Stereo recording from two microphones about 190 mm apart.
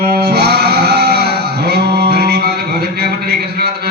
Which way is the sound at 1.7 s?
55° right (ahead or behind).